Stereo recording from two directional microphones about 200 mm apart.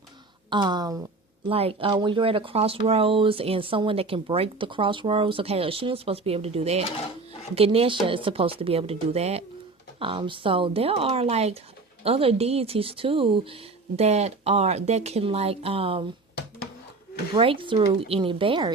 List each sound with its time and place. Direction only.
0.5 s speech: 20° right (ahead or behind)
17.3 s speech: 25° right (ahead or behind)